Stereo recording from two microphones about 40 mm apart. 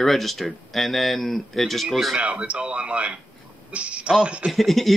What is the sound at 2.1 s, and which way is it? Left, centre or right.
Speech, right.